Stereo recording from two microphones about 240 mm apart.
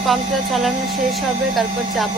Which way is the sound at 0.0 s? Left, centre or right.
Centre.